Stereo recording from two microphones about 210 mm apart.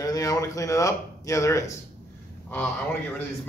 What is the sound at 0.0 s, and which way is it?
Speech, 15° left (ahead or behind).